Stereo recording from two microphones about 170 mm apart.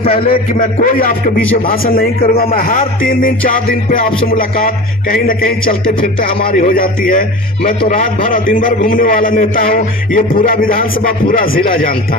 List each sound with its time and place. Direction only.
0.0 s a man's voice: 35° left (ahead or behind)
0.3 s a man's voice: 50° left (ahead or behind)